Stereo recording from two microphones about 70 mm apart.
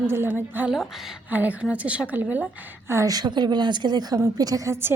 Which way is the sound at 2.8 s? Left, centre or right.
Right.